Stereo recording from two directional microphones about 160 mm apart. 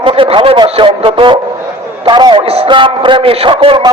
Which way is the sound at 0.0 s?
35° right (ahead or behind).